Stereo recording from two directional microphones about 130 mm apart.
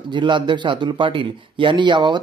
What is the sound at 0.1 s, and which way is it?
Speech, 35° right (ahead or behind).